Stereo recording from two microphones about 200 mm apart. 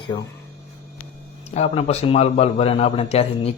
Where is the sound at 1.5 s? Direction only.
35° left (ahead or behind).